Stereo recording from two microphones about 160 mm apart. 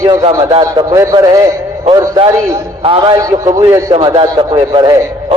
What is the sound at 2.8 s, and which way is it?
Speech, 35° right (ahead or behind).